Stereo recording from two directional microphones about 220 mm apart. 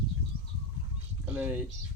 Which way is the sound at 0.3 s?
45° right (ahead or behind).